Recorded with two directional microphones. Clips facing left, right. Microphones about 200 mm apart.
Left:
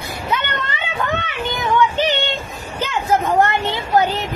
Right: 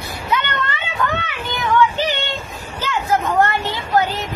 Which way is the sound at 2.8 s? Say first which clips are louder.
Left 1 dB; 20° left (ahead or behind).